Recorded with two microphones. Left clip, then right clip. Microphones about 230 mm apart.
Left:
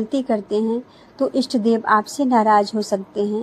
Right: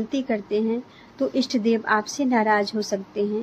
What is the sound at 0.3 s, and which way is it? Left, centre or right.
A woman's voice, centre.